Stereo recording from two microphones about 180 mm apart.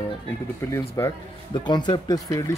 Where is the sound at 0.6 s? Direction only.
15° left (ahead or behind).